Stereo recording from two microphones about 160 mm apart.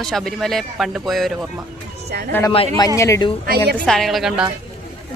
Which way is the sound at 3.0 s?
20° left (ahead or behind).